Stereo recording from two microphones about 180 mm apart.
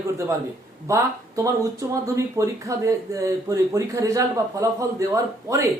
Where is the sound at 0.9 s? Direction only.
15° right (ahead or behind).